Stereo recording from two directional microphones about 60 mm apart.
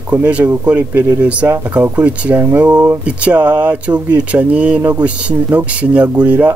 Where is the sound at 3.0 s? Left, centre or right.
Right.